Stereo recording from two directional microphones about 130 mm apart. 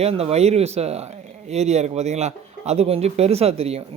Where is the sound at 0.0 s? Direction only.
50° right (ahead or behind).